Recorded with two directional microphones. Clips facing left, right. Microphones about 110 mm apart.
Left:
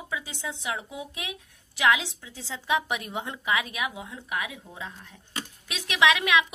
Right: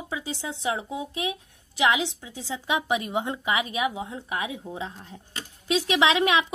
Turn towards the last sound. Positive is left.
turn(degrees=-30)  # may be behind; listen again after turning